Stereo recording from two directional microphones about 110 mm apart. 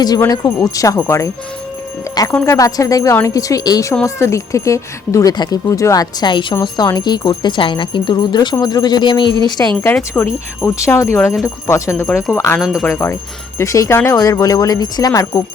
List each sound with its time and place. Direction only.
0.3 s speech: 35° left (ahead or behind)
2.1 s music: 30° left (ahead or behind)
2.5 s speech: 30° left (ahead or behind)
5.3 s speech: 40° left (ahead or behind)
5.6 s speech: 30° left (ahead or behind)
10.2 s speech: 15° left (ahead or behind)
10.6 s speech: 25° left (ahead or behind)
12.5 s speech: centre (ahead or behind)
12.8 s speech: 25° left (ahead or behind)